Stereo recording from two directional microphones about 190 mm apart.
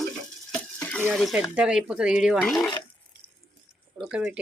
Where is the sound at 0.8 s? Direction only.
10° left (ahead or behind).